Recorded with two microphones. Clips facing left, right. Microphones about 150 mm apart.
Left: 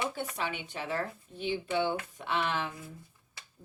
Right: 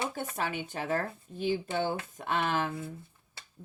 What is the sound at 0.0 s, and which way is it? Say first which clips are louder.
Speech: right 1 dB; 45° right (ahead or behind).